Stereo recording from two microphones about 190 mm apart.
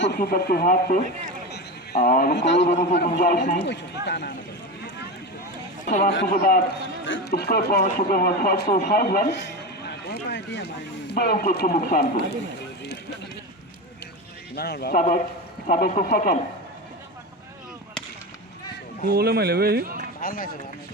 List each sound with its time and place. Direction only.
0.0 s speech: 55° left (ahead or behind)
1.5 s a sound: 60° left (ahead or behind)
2.9 s speech: 55° left (ahead or behind)
3.2 s speech: 45° left (ahead or behind)
3.7 s speech: 65° left (ahead or behind)
5.8 s a man's voice: 45° left (ahead or behind)
7.0 s speech: 65° left (ahead or behind)
11.1 s speech: 55° left (ahead or behind)
14.5 s speech: 55° left (ahead or behind)
15.6 s speech: 45° left (ahead or behind)
19.0 s a man's voice: 55° right (ahead or behind)
20.2 s speech: 50° left (ahead or behind)